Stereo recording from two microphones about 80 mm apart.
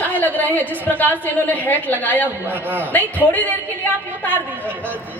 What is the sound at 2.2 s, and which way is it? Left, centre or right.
Speech, right.